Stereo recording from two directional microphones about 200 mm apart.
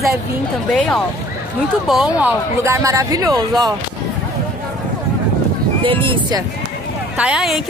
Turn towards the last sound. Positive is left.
turn(degrees=-5)  # may be behind; listen again after turning